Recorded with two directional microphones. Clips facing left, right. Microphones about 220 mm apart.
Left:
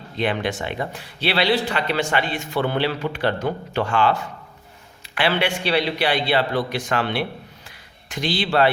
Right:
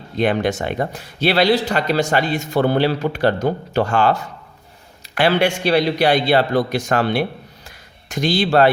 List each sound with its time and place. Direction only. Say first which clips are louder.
0.2 s a man's voice: right 5 dB; 45° right (ahead or behind)